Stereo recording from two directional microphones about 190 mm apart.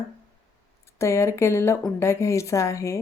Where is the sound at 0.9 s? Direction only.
15° left (ahead or behind).